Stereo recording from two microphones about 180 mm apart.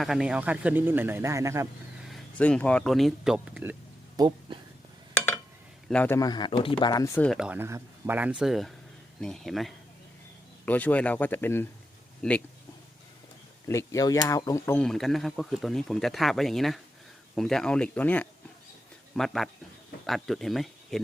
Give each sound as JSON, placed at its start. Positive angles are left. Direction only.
{"t": 0.0, "sound": "speech", "side_deg": -5}
{"t": 2.0, "sound": "speech", "side_deg": 5}
{"t": 4.2, "sound": "speech", "side_deg": -25}
{"t": 5.9, "sound": "speech", "side_deg": 10}
{"t": 6.1, "sound": "speech", "side_deg": 20}
{"t": 7.3, "sound": "speech", "side_deg": -5}
{"t": 13.7, "sound": "speech", "side_deg": 15}